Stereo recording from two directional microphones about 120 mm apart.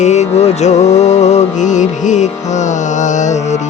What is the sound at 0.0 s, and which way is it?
Music, 70° left (ahead or behind).